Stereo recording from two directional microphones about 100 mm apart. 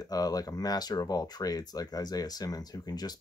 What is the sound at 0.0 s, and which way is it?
Speech, 40° left (ahead or behind).